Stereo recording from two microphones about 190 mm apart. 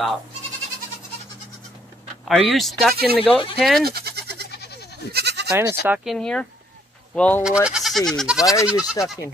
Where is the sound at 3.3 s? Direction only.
25° left (ahead or behind).